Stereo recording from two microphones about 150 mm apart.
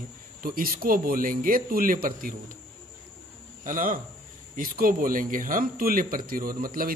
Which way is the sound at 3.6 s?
65° right (ahead or behind).